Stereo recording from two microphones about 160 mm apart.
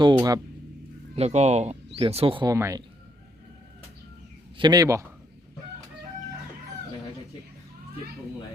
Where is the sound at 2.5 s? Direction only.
20° right (ahead or behind).